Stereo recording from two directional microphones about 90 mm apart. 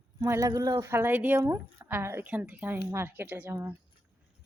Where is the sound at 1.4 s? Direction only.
35° right (ahead or behind).